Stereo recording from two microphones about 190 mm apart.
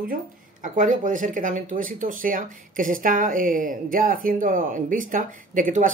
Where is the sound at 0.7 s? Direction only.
40° right (ahead or behind).